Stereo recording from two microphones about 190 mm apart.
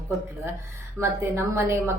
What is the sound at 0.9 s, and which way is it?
Speech, 15° right (ahead or behind).